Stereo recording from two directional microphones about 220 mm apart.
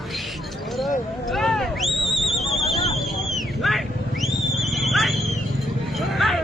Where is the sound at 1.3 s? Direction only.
Centre (ahead or behind).